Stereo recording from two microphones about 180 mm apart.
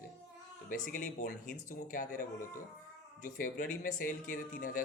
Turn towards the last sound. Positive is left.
turn(degrees=50)  # may be behind; listen again after turning